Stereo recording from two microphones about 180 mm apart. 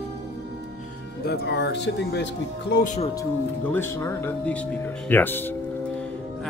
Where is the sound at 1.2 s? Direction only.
65° left (ahead or behind).